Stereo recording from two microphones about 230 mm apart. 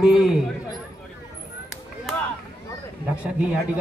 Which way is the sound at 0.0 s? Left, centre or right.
Centre.